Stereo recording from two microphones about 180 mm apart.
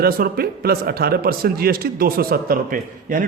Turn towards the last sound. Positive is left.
turn(degrees=-50)  # may be behind; listen again after turning